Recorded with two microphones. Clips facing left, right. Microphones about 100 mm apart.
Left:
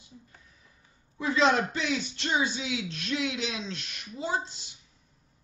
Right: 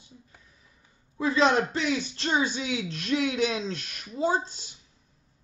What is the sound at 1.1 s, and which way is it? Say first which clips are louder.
Speech: right 2 dB; 30° right (ahead or behind).